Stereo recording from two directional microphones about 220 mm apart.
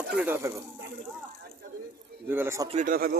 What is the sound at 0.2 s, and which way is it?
Speech, 10° right (ahead or behind).